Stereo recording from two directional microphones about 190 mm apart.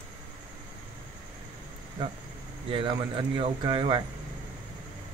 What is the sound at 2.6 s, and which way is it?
Speech, 25° right (ahead or behind).